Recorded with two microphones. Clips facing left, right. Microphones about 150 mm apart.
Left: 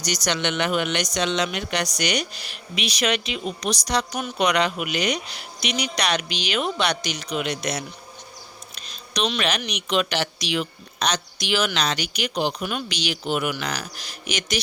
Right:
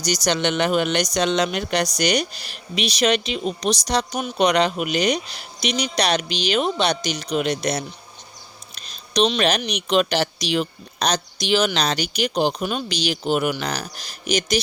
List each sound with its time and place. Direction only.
0.0 s speech: 35° right (ahead or behind)